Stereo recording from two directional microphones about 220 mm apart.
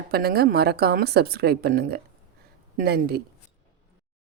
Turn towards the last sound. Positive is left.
turn(degrees=-45)  # may be behind; listen again after turning